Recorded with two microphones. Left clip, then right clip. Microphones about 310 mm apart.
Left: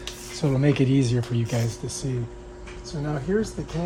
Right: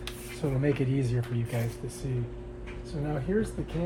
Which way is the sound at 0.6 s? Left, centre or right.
Left.